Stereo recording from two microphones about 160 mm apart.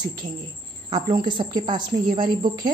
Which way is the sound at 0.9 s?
30° right (ahead or behind).